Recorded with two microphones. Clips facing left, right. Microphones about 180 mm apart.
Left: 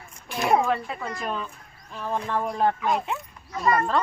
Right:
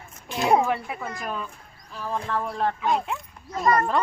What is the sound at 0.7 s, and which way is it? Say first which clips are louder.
Speech: left 1 dB; 15° right (ahead or behind).